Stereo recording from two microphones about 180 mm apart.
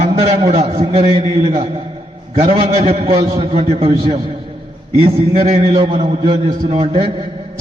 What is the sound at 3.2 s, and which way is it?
Speech, 20° right (ahead or behind).